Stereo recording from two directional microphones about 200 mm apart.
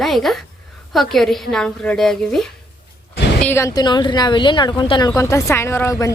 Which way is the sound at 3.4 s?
15° left (ahead or behind).